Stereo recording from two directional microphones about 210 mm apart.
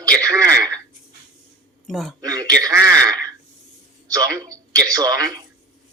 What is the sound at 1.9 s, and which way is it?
Speech, centre (ahead or behind).